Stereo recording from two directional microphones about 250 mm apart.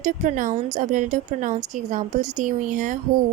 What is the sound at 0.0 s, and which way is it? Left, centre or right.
A woman's voice, right.